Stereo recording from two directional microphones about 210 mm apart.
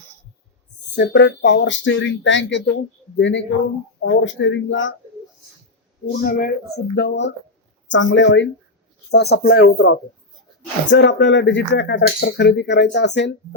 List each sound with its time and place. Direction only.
0.9 s speech: 55° left (ahead or behind)
6.1 s speech: 45° left (ahead or behind)
10.8 s speech: 55° left (ahead or behind)